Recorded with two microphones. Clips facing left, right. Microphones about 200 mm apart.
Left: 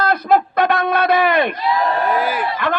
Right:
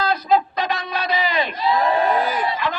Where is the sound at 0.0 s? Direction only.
60° left (ahead or behind).